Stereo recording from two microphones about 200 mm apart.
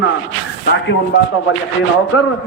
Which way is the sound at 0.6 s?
55° left (ahead or behind).